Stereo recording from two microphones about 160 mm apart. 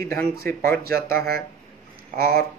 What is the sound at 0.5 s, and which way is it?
Speech, 15° left (ahead or behind).